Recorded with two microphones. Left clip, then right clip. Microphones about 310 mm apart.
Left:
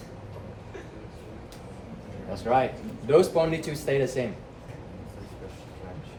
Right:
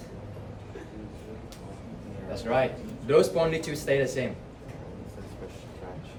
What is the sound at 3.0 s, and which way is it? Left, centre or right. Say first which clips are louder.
A man's voice: left 1 dB; centre.